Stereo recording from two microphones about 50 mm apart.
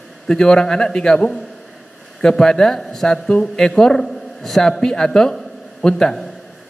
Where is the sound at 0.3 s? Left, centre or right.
Centre.